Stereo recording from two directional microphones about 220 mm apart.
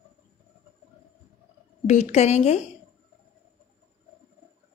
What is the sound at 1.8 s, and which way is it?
Speech, 30° left (ahead or behind).